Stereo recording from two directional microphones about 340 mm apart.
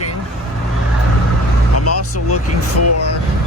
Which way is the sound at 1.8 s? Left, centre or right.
Left.